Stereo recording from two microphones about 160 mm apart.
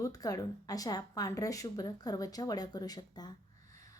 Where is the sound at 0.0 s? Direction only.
25° left (ahead or behind).